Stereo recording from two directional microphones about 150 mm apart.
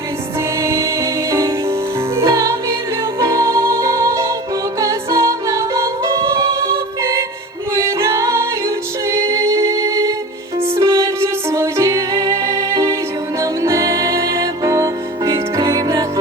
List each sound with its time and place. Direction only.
0.6 s music: 20° right (ahead or behind)
9.0 s singing: 20° right (ahead or behind)
10.8 s music: 20° right (ahead or behind)